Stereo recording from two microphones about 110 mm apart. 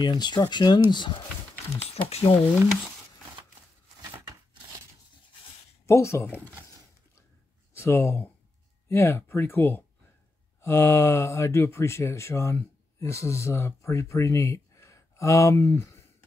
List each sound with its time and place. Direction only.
0.0 s speech: 40° left (ahead or behind)
2.0 s speech: 65° left (ahead or behind)
5.9 s speech: 25° left (ahead or behind)
7.7 s speech: 25° left (ahead or behind)